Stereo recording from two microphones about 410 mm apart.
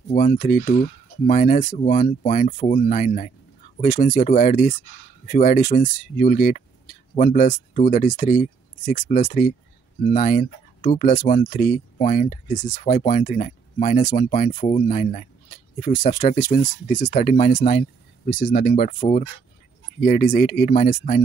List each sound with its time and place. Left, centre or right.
0.1 s speech: centre